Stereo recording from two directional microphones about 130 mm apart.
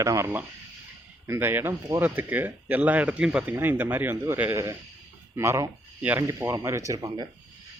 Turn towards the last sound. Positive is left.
turn(degrees=-25)  # may be behind; listen again after turning